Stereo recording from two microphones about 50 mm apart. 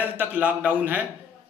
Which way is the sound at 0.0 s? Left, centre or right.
Right.